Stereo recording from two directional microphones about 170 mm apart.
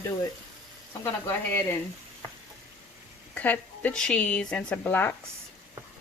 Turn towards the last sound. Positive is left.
turn(degrees=10)  # may be behind; listen again after turning